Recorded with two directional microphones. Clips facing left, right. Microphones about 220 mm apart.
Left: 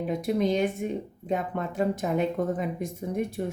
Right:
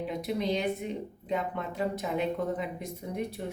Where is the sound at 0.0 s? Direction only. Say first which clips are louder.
Left 5 dB; 45° left (ahead or behind).